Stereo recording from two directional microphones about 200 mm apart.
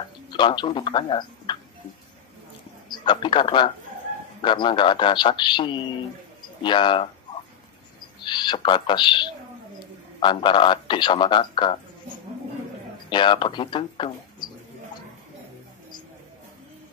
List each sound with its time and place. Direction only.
0.3 s speech: 25° left (ahead or behind)
2.9 s a man's voice: 25° left (ahead or behind)
8.2 s a man's voice: 20° left (ahead or behind)
13.1 s a man's voice: 25° left (ahead or behind)